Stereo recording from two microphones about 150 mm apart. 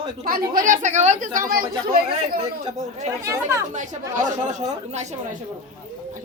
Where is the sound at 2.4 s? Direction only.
50° right (ahead or behind).